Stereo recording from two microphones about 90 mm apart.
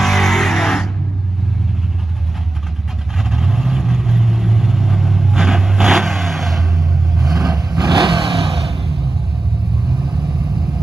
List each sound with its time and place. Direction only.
0.0 s music: 5° left (ahead or behind)
3.2 s vehicle: centre (ahead or behind)
7.5 s vehicle: 55° right (ahead or behind); by 8.9 s 85° right
10.0 s vehicle: 65° right (ahead or behind)